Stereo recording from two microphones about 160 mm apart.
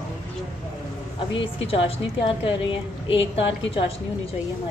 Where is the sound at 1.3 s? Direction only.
35° left (ahead or behind).